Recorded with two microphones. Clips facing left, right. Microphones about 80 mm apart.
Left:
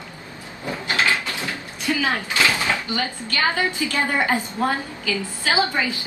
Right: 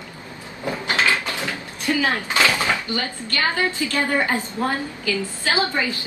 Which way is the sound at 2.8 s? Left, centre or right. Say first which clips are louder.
Left 1 dB; left.